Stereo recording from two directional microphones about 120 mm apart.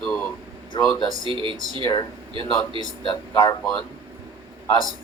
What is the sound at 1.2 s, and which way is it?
Speech, 45° right (ahead or behind).